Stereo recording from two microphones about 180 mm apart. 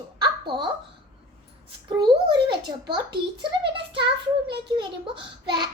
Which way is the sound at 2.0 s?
25° right (ahead or behind).